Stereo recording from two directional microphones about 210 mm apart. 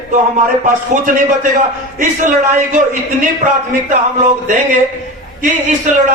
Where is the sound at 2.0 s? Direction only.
35° right (ahead or behind).